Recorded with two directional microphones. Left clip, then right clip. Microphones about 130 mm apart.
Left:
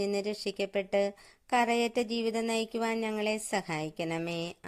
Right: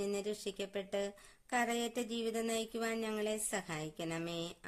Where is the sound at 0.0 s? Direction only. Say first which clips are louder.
Left 7 dB; 40° left (ahead or behind).